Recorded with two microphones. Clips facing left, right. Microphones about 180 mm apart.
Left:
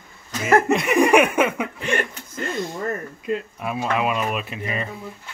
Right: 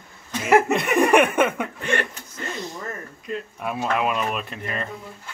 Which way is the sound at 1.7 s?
15° left (ahead or behind).